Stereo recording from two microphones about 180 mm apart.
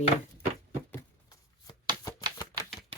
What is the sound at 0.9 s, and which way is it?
Shuffling cards, 20° left (ahead or behind).